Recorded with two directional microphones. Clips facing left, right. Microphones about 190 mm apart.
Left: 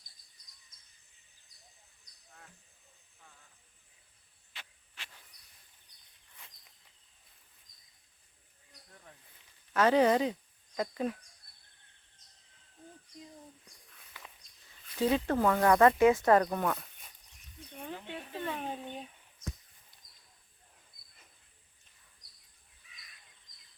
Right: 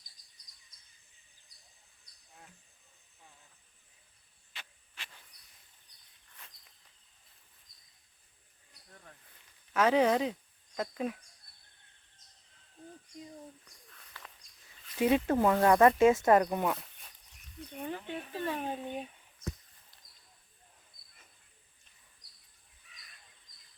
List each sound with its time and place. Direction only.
9.7 s speech: 5° right (ahead or behind)
14.9 s speech: 10° right (ahead or behind)
15.3 s speech: 20° right (ahead or behind)
16.6 s speech: centre (ahead or behind)
17.8 s a sound: centre (ahead or behind)